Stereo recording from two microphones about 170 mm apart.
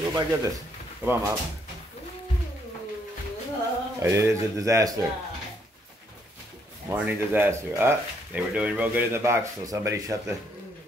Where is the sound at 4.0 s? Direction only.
15° right (ahead or behind).